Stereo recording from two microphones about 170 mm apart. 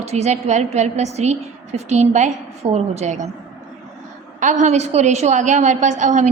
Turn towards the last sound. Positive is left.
turn(degrees=-45)  # may be behind; listen again after turning